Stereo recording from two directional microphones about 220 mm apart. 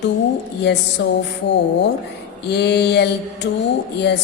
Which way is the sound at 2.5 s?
50° left (ahead or behind).